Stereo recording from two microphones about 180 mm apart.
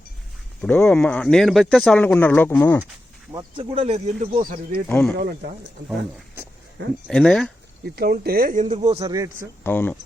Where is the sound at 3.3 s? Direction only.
20° right (ahead or behind).